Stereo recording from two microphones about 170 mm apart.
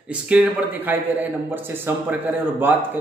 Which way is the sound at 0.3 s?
10° right (ahead or behind).